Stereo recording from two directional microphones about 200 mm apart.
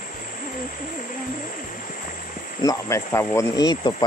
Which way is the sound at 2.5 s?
15° left (ahead or behind).